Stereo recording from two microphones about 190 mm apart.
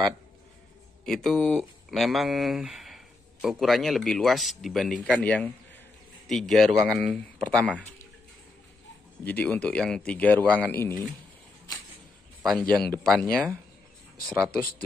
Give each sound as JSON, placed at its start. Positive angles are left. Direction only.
{"t": 1.0, "sound": "speech", "side_deg": 0}
{"t": 9.2, "sound": "speech", "side_deg": 10}
{"t": 13.0, "sound": "speech", "side_deg": 5}
{"t": 14.3, "sound": "speech", "side_deg": -15}